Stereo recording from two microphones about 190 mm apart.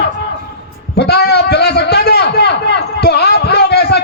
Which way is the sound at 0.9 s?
60° left (ahead or behind).